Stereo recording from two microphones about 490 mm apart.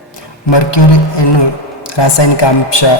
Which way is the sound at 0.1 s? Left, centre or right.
Left.